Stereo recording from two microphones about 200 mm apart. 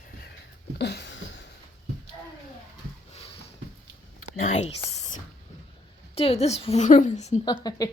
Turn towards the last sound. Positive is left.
turn(degrees=20)  # may be behind; listen again after turning